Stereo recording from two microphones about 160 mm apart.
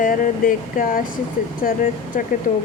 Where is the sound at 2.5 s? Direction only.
60° left (ahead or behind).